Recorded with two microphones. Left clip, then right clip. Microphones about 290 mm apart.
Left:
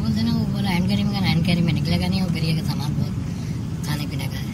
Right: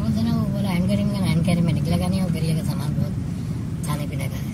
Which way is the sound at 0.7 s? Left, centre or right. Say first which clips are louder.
Even; centre.